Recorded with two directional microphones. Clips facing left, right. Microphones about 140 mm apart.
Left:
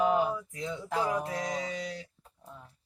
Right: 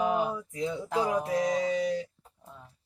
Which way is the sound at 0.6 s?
20° right (ahead or behind).